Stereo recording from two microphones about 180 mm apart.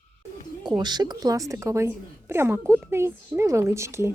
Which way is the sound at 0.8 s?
25° right (ahead or behind).